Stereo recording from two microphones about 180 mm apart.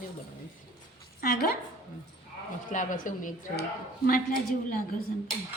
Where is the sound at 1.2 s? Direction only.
60° left (ahead or behind).